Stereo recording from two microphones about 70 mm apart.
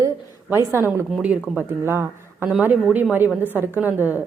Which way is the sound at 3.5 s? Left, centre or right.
Right.